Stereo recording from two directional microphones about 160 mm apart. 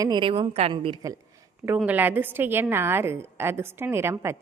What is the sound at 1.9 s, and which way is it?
A woman's voice, 10° right (ahead or behind).